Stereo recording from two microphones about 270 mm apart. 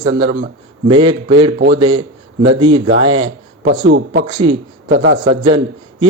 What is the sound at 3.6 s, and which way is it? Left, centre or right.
Speech, right.